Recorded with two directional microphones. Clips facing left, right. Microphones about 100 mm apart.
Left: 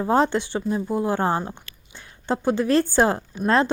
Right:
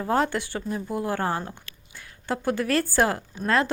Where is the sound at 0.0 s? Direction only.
20° left (ahead or behind).